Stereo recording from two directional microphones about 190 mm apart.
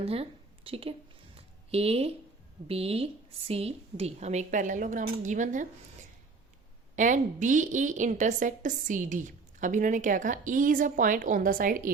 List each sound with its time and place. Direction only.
0.0 s speech: 30° right (ahead or behind)
1.4 s a sound: 30° right (ahead or behind)
2.6 s a woman's voice: 30° right (ahead or behind)
6.9 s a woman's voice: 40° right (ahead or behind)